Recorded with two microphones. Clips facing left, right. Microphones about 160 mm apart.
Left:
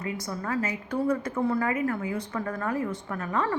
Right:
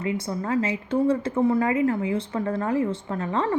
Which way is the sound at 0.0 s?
25° right (ahead or behind).